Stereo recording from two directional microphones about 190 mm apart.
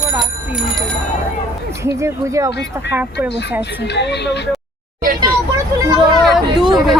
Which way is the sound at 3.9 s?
65° left (ahead or behind).